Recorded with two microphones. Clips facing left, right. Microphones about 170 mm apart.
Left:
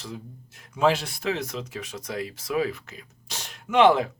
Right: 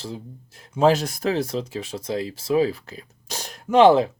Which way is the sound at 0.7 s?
40° right (ahead or behind).